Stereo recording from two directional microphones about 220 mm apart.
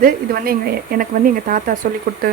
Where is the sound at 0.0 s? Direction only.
40° right (ahead or behind).